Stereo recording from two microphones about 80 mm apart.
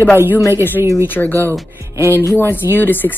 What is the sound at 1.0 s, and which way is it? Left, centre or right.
Speech, left.